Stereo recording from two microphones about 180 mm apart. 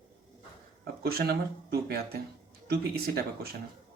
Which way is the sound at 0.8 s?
60° right (ahead or behind).